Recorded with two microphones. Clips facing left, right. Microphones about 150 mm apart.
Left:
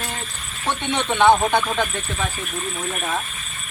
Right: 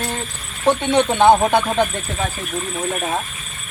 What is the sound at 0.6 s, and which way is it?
Speech, 45° right (ahead or behind).